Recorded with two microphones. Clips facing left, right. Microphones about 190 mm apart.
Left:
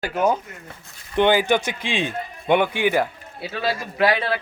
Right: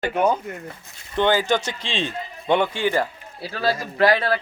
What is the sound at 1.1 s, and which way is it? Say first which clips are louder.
A man's voice: left 2 dB; 15° left (ahead or behind).